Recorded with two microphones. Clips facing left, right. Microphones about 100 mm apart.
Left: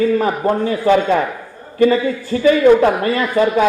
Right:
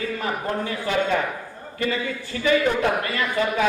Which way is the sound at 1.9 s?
35° left (ahead or behind).